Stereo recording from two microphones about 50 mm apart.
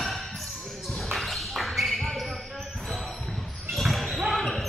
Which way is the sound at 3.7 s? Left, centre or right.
Centre.